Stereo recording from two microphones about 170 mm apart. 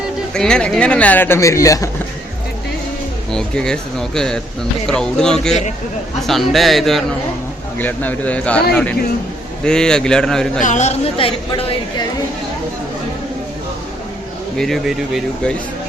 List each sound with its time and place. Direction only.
0.3 s speech: 5° left (ahead or behind)
3.3 s speech: 5° left (ahead or behind)
9.6 s speech: 5° left (ahead or behind)
10.6 s a woman's voice: 45° left (ahead or behind)
14.6 s speech: centre (ahead or behind)